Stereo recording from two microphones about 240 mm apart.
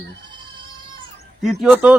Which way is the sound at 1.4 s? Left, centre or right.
Centre.